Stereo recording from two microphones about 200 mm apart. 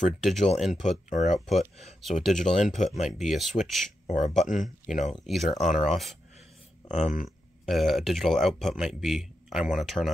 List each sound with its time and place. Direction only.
0.0 s a man's voice: centre (ahead or behind)
1.1 s speech: 35° left (ahead or behind)
1.4 s a man's voice: centre (ahead or behind)
4.5 s speech: 40° left (ahead or behind)
5.2 s a man's voice: centre (ahead or behind)
5.7 s speech: 35° left (ahead or behind)
7.6 s a man's voice: centre (ahead or behind)